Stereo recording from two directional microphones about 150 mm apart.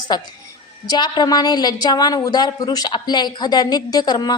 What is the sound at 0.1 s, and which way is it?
A woman's voice, 30° left (ahead or behind).